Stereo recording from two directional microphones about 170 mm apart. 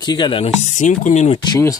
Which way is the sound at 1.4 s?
20° left (ahead or behind).